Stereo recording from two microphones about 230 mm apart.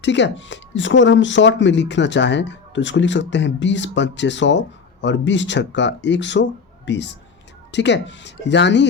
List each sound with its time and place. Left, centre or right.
0.0 s speech: left